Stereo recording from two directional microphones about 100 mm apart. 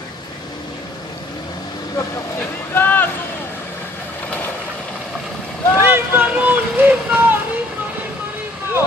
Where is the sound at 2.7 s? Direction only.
20° left (ahead or behind).